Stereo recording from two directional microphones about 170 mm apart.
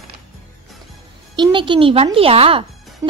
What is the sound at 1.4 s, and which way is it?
A woman's voice, 30° right (ahead or behind).